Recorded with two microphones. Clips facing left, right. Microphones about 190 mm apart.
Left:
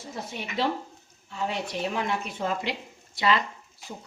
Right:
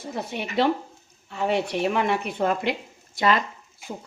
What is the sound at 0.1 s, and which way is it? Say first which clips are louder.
A woman's voice: right 6 dB; 65° right (ahead or behind).